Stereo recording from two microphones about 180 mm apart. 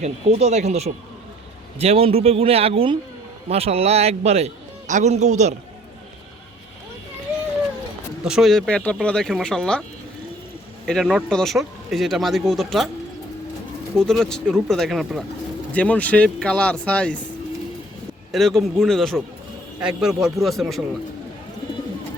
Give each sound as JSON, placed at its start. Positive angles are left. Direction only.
{"t": 0.0, "sound": "a man's voice", "side_deg": -35}
{"t": 8.2, "sound": "a man's voice", "side_deg": 0}
{"t": 10.8, "sound": "a man's voice", "side_deg": 0}
{"t": 14.0, "sound": "a man's voice", "side_deg": 5}
{"t": 18.3, "sound": "a man's voice", "side_deg": 0}